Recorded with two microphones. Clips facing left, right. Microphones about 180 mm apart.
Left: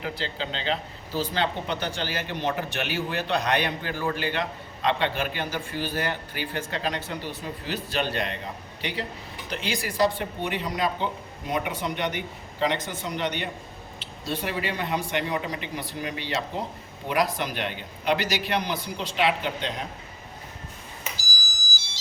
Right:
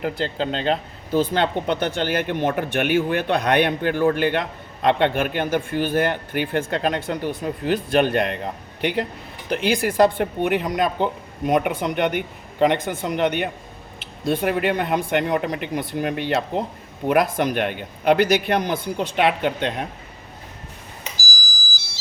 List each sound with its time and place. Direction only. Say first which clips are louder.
0.0 s speech: right 8 dB; 50° right (ahead or behind)